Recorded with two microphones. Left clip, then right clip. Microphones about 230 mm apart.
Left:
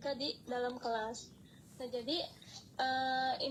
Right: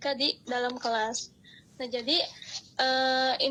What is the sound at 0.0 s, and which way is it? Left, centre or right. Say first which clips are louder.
A woman's voice: right 10 dB; right.